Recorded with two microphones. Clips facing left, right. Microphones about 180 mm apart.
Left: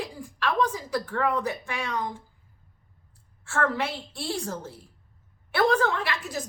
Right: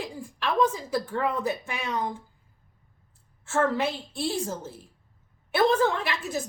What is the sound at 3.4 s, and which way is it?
A woman's voice, 20° right (ahead or behind).